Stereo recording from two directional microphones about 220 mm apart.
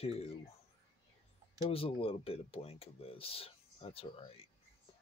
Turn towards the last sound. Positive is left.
turn(degrees=25)  # may be behind; listen again after turning